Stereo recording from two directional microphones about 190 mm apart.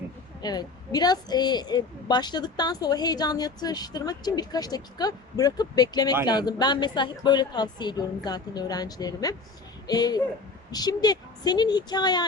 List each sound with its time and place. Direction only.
0.4 s a woman's voice: 20° left (ahead or behind)